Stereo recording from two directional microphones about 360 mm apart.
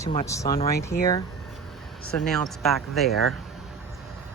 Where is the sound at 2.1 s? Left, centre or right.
Centre.